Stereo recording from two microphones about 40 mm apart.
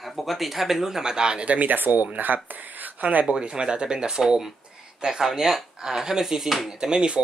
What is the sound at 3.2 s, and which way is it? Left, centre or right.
Speech, right.